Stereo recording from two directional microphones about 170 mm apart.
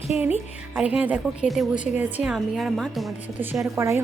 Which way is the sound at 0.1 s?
10° right (ahead or behind).